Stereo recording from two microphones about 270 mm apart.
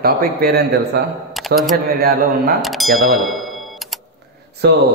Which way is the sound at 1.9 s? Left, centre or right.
Right.